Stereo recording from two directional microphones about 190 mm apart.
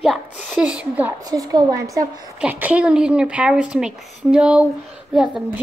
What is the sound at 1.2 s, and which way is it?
A woman's voice, 20° right (ahead or behind).